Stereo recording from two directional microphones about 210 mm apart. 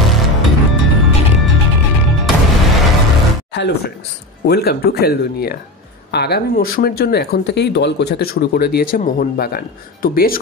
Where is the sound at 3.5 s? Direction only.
55° left (ahead or behind).